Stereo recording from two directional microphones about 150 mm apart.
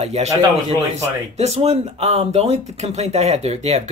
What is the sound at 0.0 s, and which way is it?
Speech, 45° right (ahead or behind).